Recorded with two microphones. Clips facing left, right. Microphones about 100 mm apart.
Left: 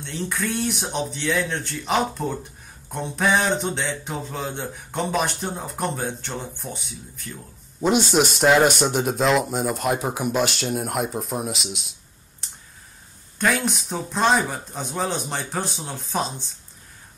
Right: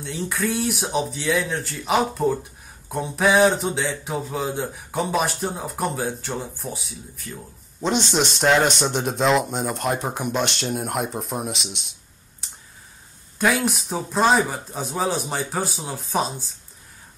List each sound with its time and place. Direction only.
0.0 s speech: centre (ahead or behind)